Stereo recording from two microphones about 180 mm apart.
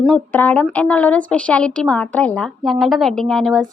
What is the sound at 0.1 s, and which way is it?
A woman's voice, 10° left (ahead or behind).